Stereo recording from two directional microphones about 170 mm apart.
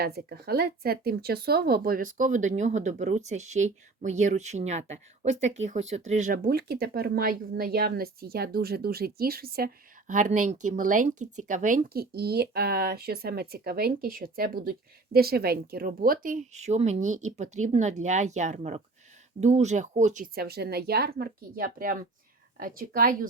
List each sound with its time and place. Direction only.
0.0 s speech: 70° right (ahead or behind)